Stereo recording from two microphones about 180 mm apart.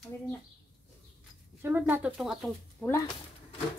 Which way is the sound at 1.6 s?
10° right (ahead or behind).